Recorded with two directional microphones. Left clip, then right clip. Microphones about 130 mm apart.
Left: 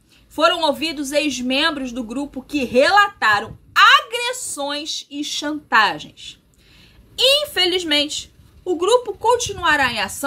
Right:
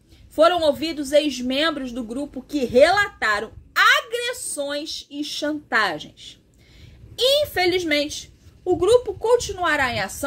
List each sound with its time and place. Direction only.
0.4 s a woman's voice: 30° left (ahead or behind)